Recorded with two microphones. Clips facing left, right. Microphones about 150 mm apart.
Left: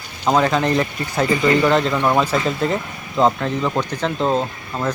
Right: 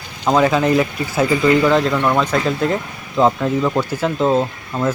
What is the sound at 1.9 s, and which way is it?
Speech, 10° left (ahead or behind).